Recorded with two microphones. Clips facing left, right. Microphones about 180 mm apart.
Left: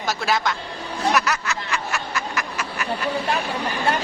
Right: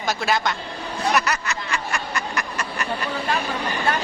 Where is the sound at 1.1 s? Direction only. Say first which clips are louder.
Even; centre (ahead or behind).